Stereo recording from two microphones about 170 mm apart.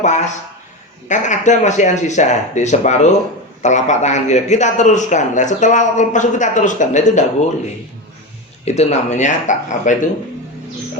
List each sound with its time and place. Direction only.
0.0 s a man's voice: 45° left (ahead or behind)
8.6 s a man's voice: 40° left (ahead or behind)